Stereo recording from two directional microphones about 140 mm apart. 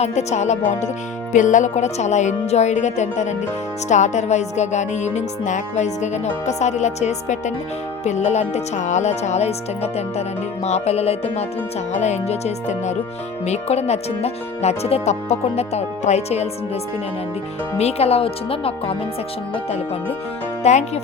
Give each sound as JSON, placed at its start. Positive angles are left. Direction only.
{"t": 0.0, "sound": "music", "side_deg": 50}
{"t": 8.0, "sound": "speech", "side_deg": 55}
{"t": 17.7, "sound": "speech", "side_deg": 50}